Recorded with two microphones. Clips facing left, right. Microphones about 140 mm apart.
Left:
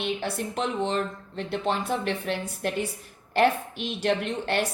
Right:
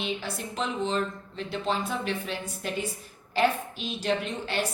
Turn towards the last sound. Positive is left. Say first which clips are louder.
# left 3 dB
turn(degrees=60)  # may be behind; listen again after turning